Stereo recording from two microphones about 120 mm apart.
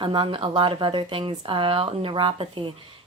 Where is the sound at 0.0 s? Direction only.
45° right (ahead or behind).